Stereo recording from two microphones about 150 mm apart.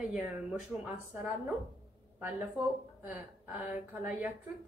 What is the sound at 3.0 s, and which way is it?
A woman's voice, 10° right (ahead or behind).